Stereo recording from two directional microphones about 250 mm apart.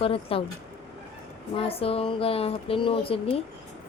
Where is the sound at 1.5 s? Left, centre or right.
Left.